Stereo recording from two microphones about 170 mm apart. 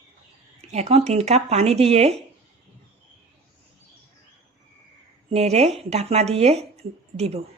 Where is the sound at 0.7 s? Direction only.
40° right (ahead or behind).